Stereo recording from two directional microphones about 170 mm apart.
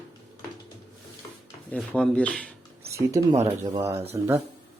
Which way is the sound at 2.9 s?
15° right (ahead or behind).